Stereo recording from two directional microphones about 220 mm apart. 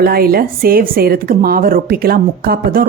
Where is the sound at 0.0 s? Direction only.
45° right (ahead or behind).